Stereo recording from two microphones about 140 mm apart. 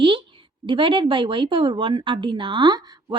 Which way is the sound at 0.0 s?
35° right (ahead or behind).